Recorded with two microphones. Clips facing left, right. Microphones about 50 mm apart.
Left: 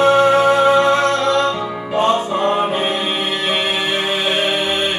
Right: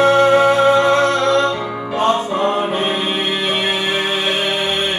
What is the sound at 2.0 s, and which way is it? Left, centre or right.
Music, centre.